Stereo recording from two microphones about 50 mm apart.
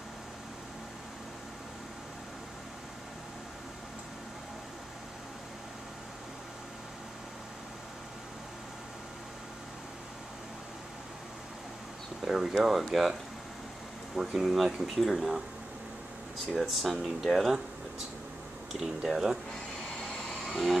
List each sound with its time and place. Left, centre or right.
12.3 s speech: centre
14.1 s speech: centre
16.5 s speech: centre
18.7 s speech: centre
20.0 s vehicle: centre
20.2 s a sound: centre